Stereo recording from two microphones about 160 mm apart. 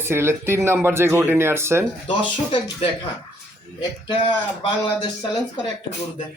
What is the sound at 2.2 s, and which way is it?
Speech, 30° left (ahead or behind).